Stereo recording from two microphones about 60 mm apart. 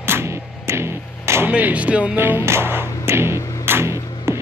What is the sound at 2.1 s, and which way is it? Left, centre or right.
Music, right.